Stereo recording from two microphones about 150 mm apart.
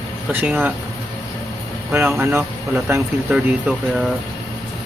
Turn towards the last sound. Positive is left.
turn(degrees=-10)  # may be behind; listen again after turning